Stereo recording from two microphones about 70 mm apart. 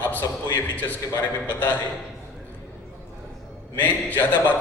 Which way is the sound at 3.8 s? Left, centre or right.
Left.